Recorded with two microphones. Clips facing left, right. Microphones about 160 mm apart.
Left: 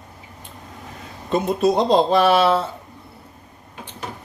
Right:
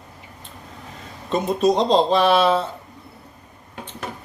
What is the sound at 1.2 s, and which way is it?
Speech, 10° left (ahead or behind).